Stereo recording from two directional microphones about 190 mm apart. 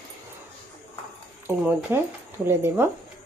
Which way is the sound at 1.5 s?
10° right (ahead or behind).